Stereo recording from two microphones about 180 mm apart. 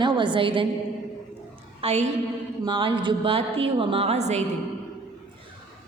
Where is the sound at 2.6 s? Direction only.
25° right (ahead or behind).